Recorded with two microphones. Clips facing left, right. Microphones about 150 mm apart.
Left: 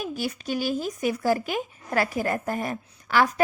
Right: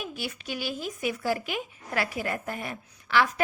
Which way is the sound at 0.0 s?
40° left (ahead or behind).